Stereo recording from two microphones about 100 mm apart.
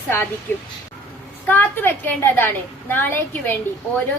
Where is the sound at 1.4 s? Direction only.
20° left (ahead or behind).